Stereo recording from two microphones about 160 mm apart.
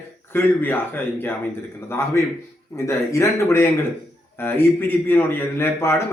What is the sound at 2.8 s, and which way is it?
A man's voice, 15° left (ahead or behind).